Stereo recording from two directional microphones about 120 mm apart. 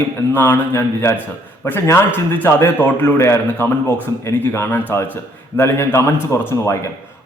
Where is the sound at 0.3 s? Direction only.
15° left (ahead or behind).